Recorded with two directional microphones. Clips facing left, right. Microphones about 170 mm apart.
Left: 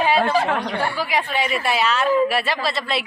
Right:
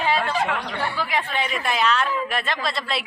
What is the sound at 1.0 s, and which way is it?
Speech, 10° left (ahead or behind).